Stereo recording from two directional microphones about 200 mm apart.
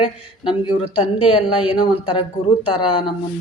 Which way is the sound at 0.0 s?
25° left (ahead or behind).